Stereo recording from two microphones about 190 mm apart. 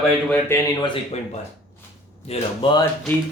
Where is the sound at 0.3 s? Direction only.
10° left (ahead or behind).